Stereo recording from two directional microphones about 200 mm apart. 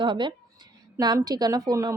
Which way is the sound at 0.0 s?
25° right (ahead or behind).